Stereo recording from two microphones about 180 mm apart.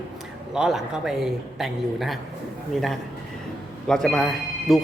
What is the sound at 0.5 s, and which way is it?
A man's voice, 5° right (ahead or behind).